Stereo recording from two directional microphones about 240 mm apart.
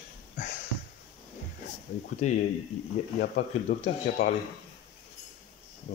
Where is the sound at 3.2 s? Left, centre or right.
Left.